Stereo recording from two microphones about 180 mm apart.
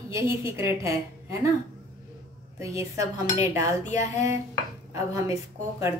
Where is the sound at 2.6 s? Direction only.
15° right (ahead or behind).